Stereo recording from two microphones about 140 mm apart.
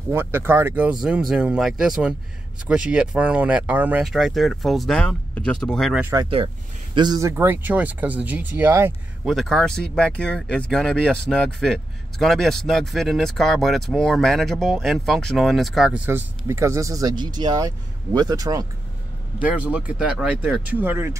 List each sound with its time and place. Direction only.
0.1 s speech: 15° right (ahead or behind); by 5.9 s 5° left (ahead or behind)
7.0 s speech: 25° right (ahead or behind)
9.3 s speech: centre (ahead or behind)
16.1 s speech: 15° right (ahead or behind)
19.4 s speech: 10° right (ahead or behind)